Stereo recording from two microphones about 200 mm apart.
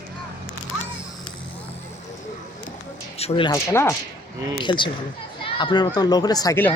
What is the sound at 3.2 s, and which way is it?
Speech, 25° left (ahead or behind).